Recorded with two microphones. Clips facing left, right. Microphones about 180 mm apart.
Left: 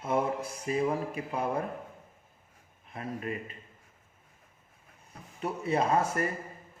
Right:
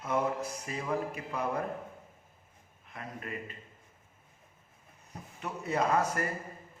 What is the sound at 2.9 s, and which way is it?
Speech, 30° left (ahead or behind).